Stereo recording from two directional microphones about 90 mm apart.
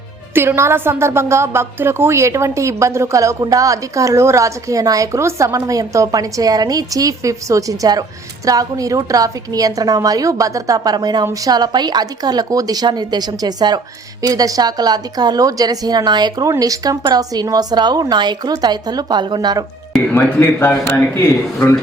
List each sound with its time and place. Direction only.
0.3 s a woman's voice: 30° right (ahead or behind); by 16.5 s 50° right (ahead or behind)
16.5 s a woman's voice: 40° right (ahead or behind)
20.1 s speech: 25° left (ahead or behind)